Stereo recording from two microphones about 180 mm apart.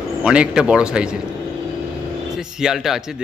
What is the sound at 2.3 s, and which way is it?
Speech, 5° right (ahead or behind).